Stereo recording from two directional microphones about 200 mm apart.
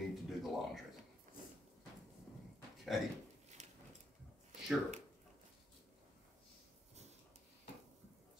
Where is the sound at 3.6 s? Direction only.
35° right (ahead or behind).